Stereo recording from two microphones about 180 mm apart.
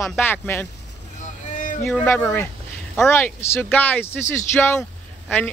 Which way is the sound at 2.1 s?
10° left (ahead or behind).